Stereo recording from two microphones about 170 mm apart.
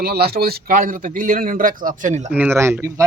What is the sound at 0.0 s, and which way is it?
Speech, 65° right (ahead or behind).